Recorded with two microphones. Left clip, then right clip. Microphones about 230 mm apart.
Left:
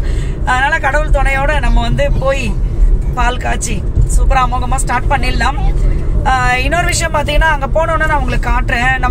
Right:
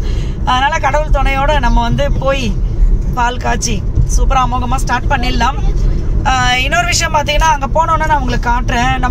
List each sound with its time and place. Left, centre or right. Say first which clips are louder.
0.6 s speech: even; centre
4.3 s speech: even; centre